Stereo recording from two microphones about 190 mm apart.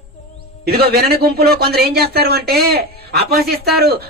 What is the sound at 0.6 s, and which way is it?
Speech, 55° right (ahead or behind).